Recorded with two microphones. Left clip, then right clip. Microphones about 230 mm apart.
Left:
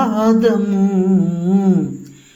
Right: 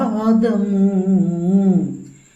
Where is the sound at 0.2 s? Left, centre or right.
Left.